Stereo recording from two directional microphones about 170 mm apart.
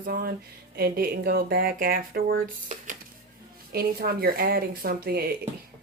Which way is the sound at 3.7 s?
60° right (ahead or behind).